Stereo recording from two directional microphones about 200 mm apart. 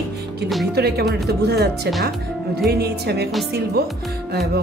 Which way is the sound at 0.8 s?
55° right (ahead or behind).